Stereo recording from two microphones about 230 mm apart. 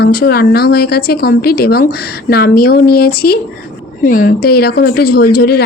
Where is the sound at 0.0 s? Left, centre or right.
Left.